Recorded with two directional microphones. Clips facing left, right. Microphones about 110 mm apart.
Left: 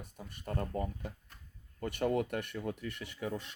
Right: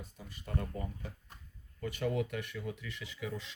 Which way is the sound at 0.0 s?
55° left (ahead or behind).